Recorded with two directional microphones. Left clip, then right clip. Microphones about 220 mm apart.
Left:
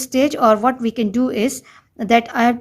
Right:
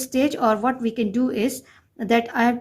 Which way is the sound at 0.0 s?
30° left (ahead or behind).